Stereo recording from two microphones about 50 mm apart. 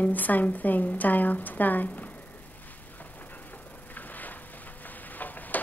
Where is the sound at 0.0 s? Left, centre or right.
Left.